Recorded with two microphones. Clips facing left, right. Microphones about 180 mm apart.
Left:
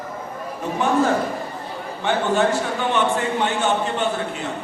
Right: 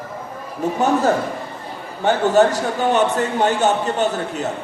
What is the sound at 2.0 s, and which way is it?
A man's voice, 40° right (ahead or behind).